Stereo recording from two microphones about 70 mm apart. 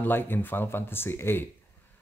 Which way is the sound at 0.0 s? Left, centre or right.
Left.